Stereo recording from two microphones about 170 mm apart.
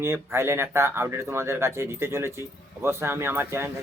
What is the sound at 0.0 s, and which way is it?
Speech, 15° right (ahead or behind).